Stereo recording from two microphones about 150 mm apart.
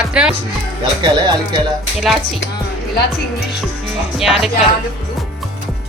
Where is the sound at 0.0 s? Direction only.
5° right (ahead or behind).